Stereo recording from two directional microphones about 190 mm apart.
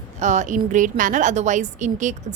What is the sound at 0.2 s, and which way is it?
A woman's voice, 40° right (ahead or behind).